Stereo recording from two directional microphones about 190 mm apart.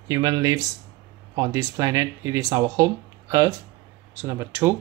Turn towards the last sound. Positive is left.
turn(degrees=-15)  # may be behind; listen again after turning